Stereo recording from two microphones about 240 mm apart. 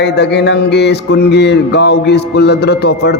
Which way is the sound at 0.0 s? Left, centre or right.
Left.